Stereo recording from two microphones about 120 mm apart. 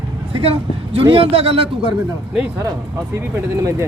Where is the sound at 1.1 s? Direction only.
50° right (ahead or behind).